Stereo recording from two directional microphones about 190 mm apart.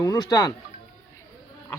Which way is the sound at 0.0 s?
20° left (ahead or behind).